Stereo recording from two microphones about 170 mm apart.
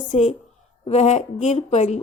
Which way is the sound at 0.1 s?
45° left (ahead or behind).